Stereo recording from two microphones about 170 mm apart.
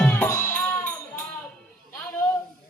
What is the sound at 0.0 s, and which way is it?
Music, 15° left (ahead or behind).